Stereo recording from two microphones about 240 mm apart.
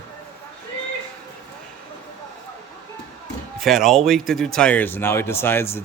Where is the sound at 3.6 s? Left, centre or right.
Centre.